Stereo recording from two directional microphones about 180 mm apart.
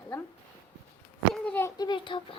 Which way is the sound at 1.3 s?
5° left (ahead or behind).